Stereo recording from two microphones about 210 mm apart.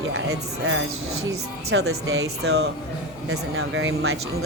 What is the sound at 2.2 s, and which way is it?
Speech, 50° right (ahead or behind).